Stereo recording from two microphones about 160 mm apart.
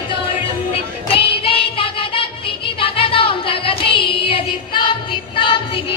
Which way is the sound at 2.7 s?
35° left (ahead or behind).